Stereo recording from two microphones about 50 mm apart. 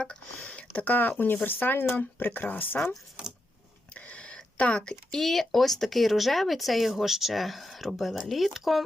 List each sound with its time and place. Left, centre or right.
0.0 s speech: centre
0.9 s speech: left
3.9 s a sound: left
5.1 s speech: centre